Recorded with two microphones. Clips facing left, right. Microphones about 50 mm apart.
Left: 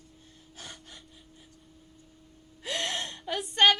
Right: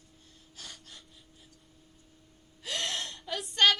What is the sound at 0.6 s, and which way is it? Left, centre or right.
Gasp, left.